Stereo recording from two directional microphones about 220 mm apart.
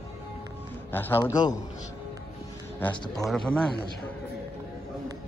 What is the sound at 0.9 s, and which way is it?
Speech, 10° left (ahead or behind).